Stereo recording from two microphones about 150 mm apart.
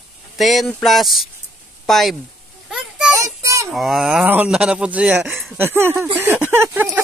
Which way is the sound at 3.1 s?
20° right (ahead or behind).